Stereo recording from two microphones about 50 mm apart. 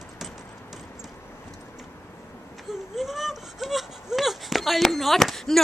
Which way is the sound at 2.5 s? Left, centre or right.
Centre.